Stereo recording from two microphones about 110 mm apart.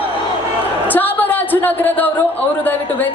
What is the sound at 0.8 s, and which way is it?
Music, 15° left (ahead or behind).